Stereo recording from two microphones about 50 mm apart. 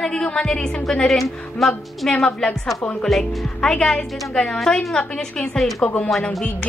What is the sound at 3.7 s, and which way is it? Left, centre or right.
A woman's voice, centre.